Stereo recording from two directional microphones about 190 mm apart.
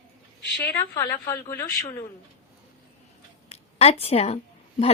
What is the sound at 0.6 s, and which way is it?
A woman's voice, 15° left (ahead or behind).